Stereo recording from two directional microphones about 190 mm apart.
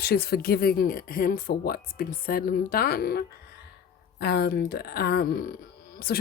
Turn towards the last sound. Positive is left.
turn(degrees=55)  # may be behind; listen again after turning